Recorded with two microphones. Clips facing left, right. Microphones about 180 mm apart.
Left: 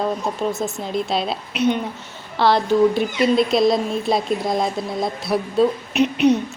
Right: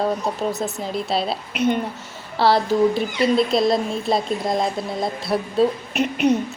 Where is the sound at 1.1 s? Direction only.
5° right (ahead or behind).